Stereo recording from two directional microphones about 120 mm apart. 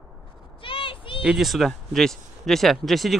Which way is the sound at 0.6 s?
45° left (ahead or behind).